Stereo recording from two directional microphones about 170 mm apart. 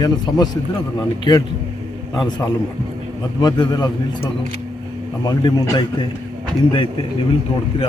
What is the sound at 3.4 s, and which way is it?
A man's voice, 25° left (ahead or behind).